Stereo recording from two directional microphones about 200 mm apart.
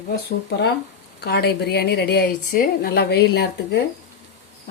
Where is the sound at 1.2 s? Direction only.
55° left (ahead or behind).